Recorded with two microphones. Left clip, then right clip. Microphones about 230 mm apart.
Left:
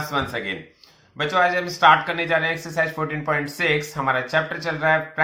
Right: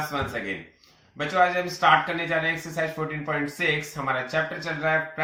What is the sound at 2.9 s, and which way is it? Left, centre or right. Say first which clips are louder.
Speech: left 5 dB; centre.